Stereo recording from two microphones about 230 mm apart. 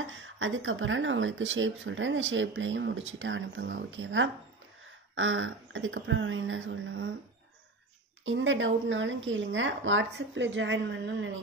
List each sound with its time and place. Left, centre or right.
0.0 s a woman's voice: right
8.3 s a woman's voice: right